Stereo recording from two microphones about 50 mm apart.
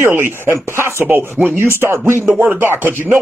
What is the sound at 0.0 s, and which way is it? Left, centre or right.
Speech, right.